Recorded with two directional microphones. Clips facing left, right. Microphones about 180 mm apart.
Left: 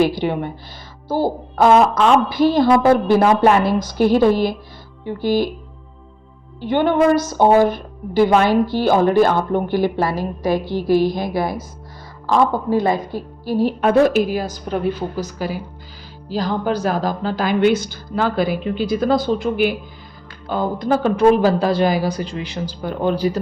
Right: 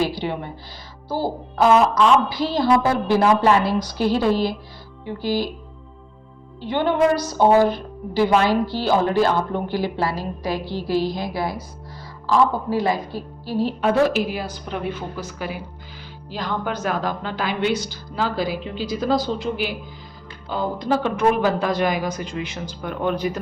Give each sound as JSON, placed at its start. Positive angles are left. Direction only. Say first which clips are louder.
{"t": 0.0, "sound": "speech", "louder": "left 6 dB", "side_deg": 50}
{"t": 6.6, "sound": "speech", "louder": "left 3 dB", "side_deg": 50}
{"t": 13.1, "sound": "a woman's voice", "louder": "left 4 dB", "side_deg": 15}
{"t": 13.8, "sound": "speech", "louder": "left 4 dB", "side_deg": 45}
{"t": 21.2, "sound": "speech", "louder": "left 7 dB", "side_deg": 35}